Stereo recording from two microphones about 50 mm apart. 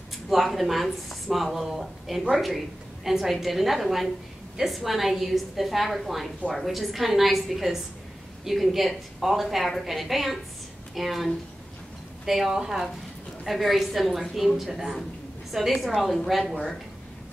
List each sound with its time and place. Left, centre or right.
0.3 s a woman's voice: centre